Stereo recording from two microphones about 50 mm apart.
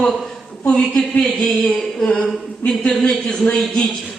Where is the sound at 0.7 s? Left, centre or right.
Left.